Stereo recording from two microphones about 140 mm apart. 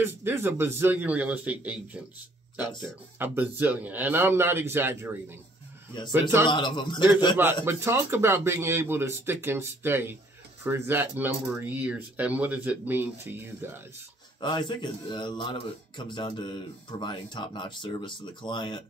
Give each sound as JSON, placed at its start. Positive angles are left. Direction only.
{"t": 0.0, "sound": "speech", "side_deg": -15}
{"t": 3.2, "sound": "speech", "side_deg": -15}
{"t": 6.5, "sound": "speech", "side_deg": 35}
{"t": 7.6, "sound": "speech", "side_deg": -15}
{"t": 14.4, "sound": "speech", "side_deg": 35}